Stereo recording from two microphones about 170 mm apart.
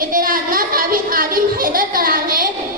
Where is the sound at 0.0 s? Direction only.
55° right (ahead or behind).